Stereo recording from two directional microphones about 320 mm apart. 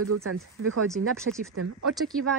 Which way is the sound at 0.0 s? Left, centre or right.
Right.